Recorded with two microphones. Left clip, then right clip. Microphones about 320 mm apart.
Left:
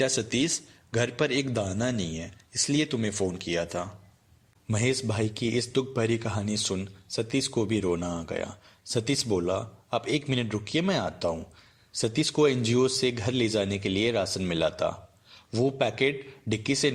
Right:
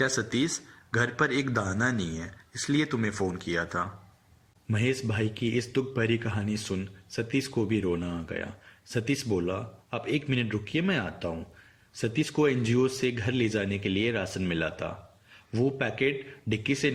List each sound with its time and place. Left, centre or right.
0.4 s speech: centre